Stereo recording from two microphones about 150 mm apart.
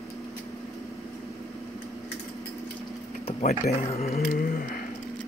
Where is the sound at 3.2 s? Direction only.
45° left (ahead or behind).